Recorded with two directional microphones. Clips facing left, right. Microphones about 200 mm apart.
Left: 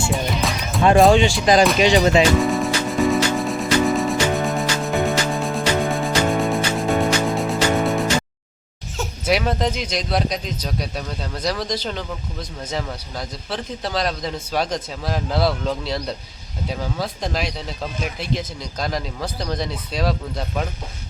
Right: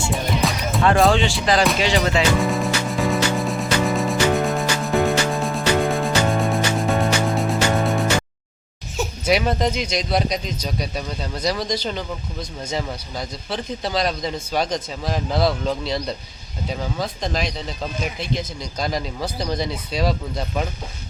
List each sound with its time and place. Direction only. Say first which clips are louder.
0.1 s music: even; centre (ahead or behind)
0.8 s speech: left 4 dB; 15° left (ahead or behind)
2.4 s music: left 1 dB; centre (ahead or behind)
9.2 s speech: even; centre (ahead or behind)